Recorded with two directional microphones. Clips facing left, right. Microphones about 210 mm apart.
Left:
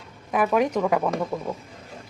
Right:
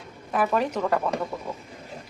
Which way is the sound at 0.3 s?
10° left (ahead or behind).